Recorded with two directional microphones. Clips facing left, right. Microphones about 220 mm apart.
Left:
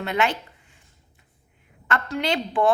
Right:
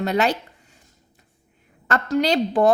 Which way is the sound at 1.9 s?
40° right (ahead or behind).